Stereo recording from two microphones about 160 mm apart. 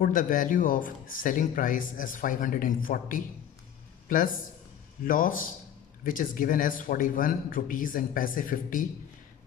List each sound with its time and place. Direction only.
0.0 s speech: 60° left (ahead or behind)